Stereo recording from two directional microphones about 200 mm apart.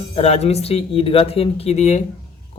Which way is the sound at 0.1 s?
30° left (ahead or behind).